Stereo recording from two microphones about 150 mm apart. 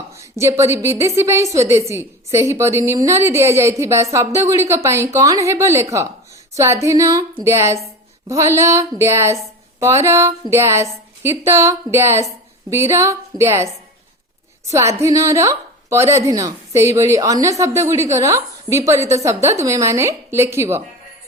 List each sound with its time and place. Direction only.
0.1 s a woman's voice: 20° right (ahead or behind)